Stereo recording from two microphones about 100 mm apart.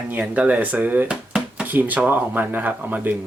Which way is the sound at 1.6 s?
20° right (ahead or behind).